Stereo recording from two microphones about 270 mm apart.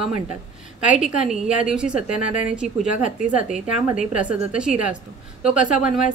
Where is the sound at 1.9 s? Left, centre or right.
Left.